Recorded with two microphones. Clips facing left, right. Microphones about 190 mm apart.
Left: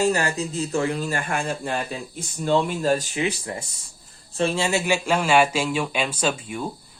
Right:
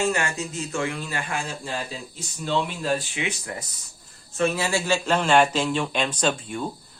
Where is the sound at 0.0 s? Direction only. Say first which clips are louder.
Left 3 dB; 35° left (ahead or behind).